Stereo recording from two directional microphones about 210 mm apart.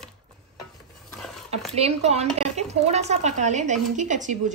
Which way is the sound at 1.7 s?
30° right (ahead or behind).